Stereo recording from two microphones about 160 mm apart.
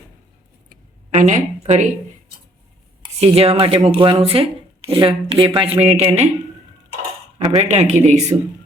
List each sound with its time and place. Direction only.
0.7 s a sound: 50° right (ahead or behind)
3.2 s speech: 40° right (ahead or behind)
5.8 s speech: 45° right (ahead or behind)
7.3 s speech: 45° right (ahead or behind)